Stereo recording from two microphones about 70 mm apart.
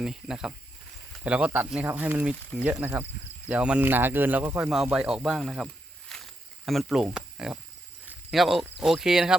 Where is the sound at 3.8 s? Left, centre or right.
Right.